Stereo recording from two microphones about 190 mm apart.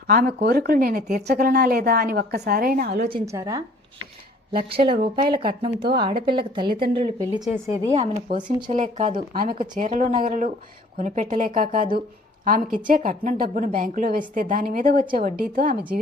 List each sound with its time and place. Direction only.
0.1 s a woman's voice: 55° right (ahead or behind)
3.2 s a woman's voice: 15° right (ahead or behind)
4.5 s speech: 30° right (ahead or behind)
7.4 s a woman's voice: 10° right (ahead or behind)
7.9 s a woman's voice: 30° right (ahead or behind); by 11.9 s 45° right (ahead or behind)
12.9 s a woman's voice: 40° right (ahead or behind)